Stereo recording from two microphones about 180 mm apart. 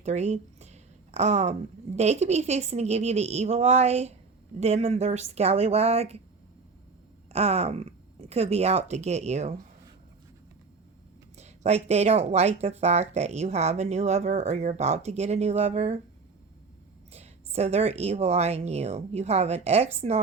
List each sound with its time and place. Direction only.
0.0 s speech: 40° right (ahead or behind)
7.3 s speech: 35° right (ahead or behind)
11.3 s speech: 35° right (ahead or behind)
17.1 s speech: 35° right (ahead or behind)